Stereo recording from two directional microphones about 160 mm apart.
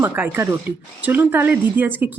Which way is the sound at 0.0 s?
15° right (ahead or behind).